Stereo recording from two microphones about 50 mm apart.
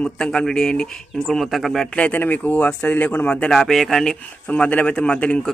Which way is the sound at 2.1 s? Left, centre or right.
Left.